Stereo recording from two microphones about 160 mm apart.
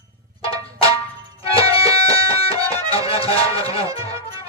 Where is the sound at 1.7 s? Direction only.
35° left (ahead or behind).